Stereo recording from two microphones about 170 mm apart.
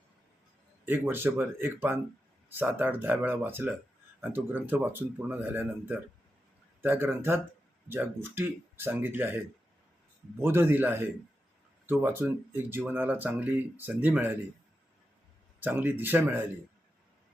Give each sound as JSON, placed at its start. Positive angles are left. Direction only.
{"t": 0.9, "sound": "speech", "side_deg": -10}
{"t": 10.4, "sound": "speech", "side_deg": -15}
{"t": 15.6, "sound": "speech", "side_deg": -10}